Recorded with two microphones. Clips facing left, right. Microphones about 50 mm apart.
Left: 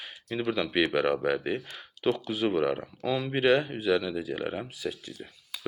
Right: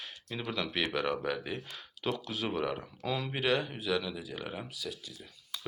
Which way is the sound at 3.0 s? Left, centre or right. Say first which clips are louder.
Left 5 dB; centre.